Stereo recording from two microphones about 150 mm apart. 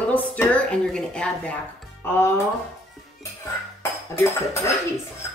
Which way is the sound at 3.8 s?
20° left (ahead or behind).